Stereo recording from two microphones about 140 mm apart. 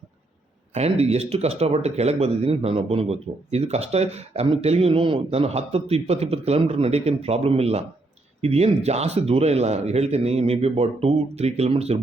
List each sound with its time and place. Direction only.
0.7 s speech: 50° right (ahead or behind)